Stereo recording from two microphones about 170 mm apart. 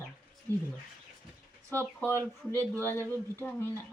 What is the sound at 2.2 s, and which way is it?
Speech, 15° right (ahead or behind).